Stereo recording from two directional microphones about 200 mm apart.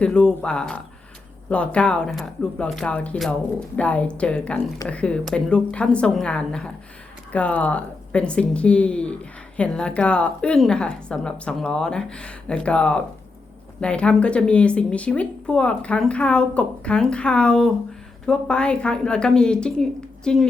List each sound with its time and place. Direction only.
0.0 s speech: 5° left (ahead or behind)